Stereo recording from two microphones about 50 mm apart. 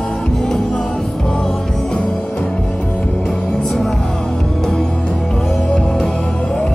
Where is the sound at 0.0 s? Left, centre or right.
Centre.